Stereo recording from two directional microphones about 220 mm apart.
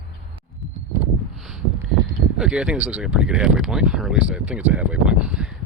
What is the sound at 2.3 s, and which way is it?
Speech, 5° right (ahead or behind).